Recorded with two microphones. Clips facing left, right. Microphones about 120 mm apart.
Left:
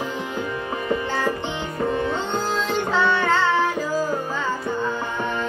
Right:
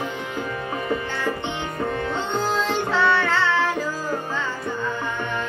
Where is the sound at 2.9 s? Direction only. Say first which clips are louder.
Left 1 dB; 20° left (ahead or behind).